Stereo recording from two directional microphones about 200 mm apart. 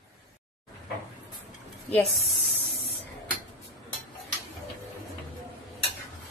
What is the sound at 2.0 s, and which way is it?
Speech, centre (ahead or behind).